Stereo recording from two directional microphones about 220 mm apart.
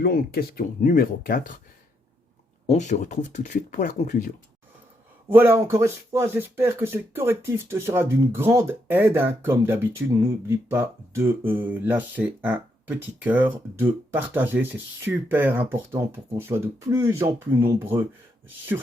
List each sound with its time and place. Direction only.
0.0 s speech: 45° left (ahead or behind)
2.6 s speech: 30° left (ahead or behind)
5.3 s speech: 10° right (ahead or behind)